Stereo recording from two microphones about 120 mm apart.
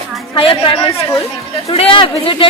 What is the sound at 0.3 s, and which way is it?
A woman's voice, 45° left (ahead or behind).